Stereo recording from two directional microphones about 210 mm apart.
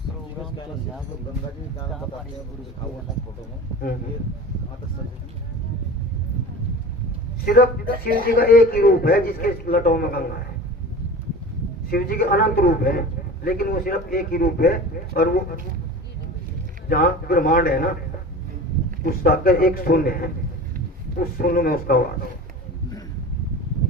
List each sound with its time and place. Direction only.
7.4 s speech: 45° left (ahead or behind)
8.1 s speech: 45° right (ahead or behind)
8.4 s speech: 45° left (ahead or behind)
11.9 s speech: 45° left (ahead or behind)
16.9 s speech: 45° left (ahead or behind)
19.0 s speech: 45° left (ahead or behind)